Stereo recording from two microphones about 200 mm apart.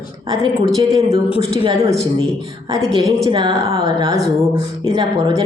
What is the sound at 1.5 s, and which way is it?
Speech, 25° right (ahead or behind).